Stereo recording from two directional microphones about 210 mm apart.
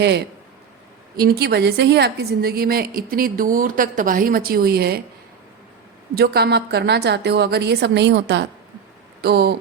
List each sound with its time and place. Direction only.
1.2 s a woman's voice: 50° right (ahead or behind)
6.1 s a woman's voice: 50° right (ahead or behind)